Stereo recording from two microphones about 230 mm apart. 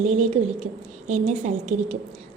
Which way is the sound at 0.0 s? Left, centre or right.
Right.